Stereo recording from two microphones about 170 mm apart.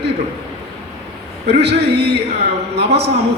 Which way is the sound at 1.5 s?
75° right (ahead or behind).